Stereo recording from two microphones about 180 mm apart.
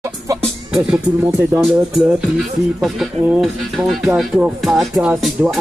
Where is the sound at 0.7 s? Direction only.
5° right (ahead or behind).